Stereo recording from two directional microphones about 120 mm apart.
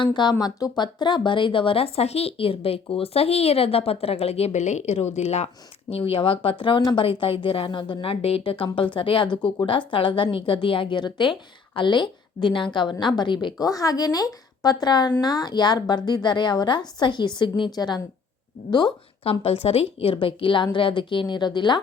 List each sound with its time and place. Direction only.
0.0 s speech: 40° left (ahead or behind); by 5.5 s 65° left (ahead or behind)
5.9 s a woman's voice: 50° left (ahead or behind)
13.7 s a woman's voice: 30° left (ahead or behind)
19.2 s a woman's voice: 55° left (ahead or behind)